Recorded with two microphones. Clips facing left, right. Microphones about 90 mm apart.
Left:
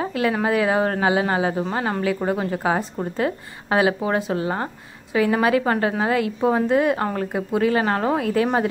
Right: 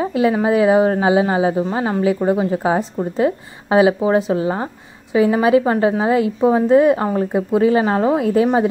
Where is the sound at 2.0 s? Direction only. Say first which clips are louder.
Right 6 dB; 20° right (ahead or behind).